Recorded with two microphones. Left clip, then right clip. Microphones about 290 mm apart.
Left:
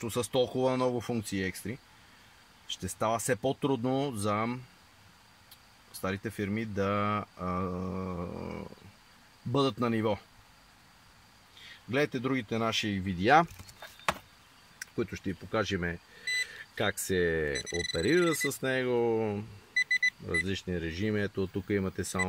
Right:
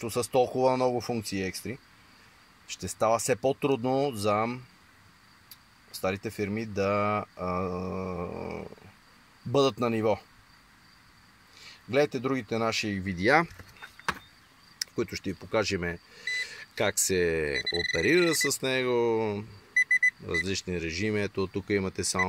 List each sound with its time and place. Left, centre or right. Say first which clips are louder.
0.0 s speech: right 4 dB; centre
2.8 s speech: right 5 dB; centre
5.9 s speech: right 4 dB; centre
11.9 s speech: right 4 dB; centre
14.8 s speech: right 4 dB; centre
19.8 s alarm clock: right 4 dB; right
20.4 s speech: right 3 dB; centre